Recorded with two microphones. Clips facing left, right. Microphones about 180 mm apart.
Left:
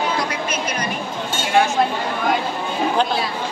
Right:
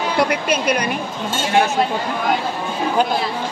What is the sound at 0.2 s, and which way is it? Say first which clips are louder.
Speech: right 6 dB; 65° right (ahead or behind).